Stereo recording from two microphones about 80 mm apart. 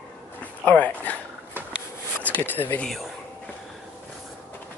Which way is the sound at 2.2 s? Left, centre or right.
Left.